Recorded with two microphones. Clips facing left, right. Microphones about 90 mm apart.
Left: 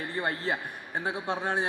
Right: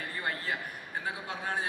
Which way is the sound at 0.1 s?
30° left (ahead or behind).